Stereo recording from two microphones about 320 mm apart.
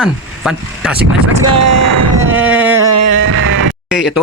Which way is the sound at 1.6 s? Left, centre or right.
Right.